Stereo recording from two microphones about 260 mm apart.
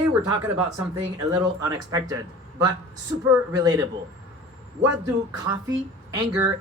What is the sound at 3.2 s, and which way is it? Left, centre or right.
Speech, centre.